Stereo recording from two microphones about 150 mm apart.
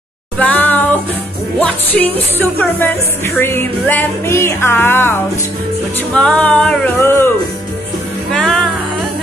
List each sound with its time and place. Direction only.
0.4 s music: 10° left (ahead or behind)
8.3 s music: 5° left (ahead or behind)